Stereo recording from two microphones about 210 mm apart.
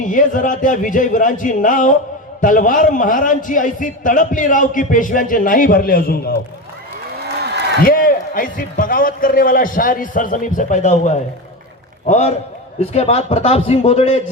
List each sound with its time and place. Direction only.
0.0 s a man's voice: 40° left (ahead or behind)
7.9 s a man's voice: 40° left (ahead or behind)